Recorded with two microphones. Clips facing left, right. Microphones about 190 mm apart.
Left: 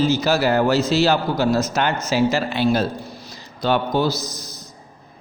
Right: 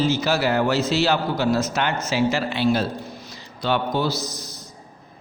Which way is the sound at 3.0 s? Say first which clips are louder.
Even; 35° left (ahead or behind).